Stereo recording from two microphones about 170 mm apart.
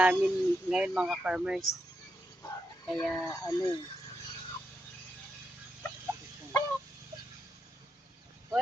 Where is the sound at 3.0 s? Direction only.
Centre (ahead or behind).